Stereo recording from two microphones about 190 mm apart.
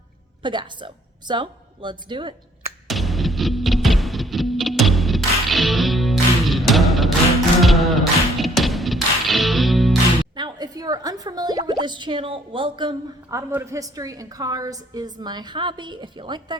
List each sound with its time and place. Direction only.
0.4 s a woman's voice: 25° right (ahead or behind)
2.8 s music: centre (ahead or behind)
10.3 s speech: 20° right (ahead or behind)
13.5 s speech: 15° right (ahead or behind)